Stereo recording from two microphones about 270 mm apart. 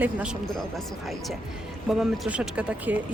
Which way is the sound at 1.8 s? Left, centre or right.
Centre.